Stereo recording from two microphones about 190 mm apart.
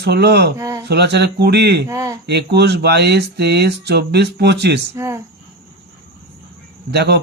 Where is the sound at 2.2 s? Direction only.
60° right (ahead or behind).